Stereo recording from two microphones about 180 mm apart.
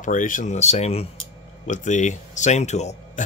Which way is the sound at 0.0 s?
45° left (ahead or behind).